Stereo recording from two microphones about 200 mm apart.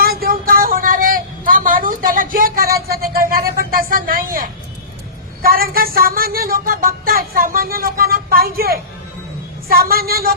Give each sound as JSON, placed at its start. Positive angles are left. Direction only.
{"t": 0.0, "sound": "vehicle", "side_deg": -50}
{"t": 5.4, "sound": "speech", "side_deg": -50}
{"t": 9.9, "sound": "speech", "side_deg": -50}